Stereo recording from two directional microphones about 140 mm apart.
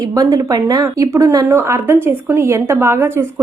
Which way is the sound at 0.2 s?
25° right (ahead or behind).